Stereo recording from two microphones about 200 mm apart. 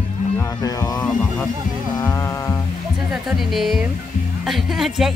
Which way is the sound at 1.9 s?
15° left (ahead or behind).